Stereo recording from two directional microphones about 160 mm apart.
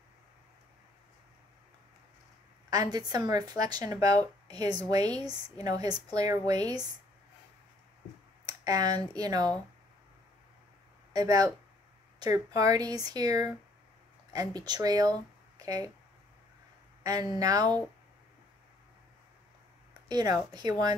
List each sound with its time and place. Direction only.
2.7 s a woman's voice: 25° right (ahead or behind)
8.5 s speech: 25° right (ahead or behind)
11.1 s a woman's voice: 25° right (ahead or behind)
17.0 s a woman's voice: 25° right (ahead or behind)
20.1 s a woman's voice: 25° right (ahead or behind)